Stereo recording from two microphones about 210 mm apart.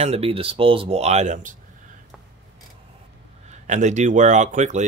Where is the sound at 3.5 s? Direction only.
35° right (ahead or behind).